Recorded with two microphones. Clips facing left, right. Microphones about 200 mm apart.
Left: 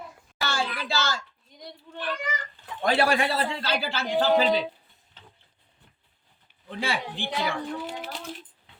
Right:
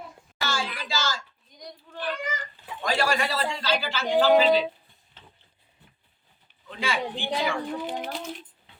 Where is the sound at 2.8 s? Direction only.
60° left (ahead or behind).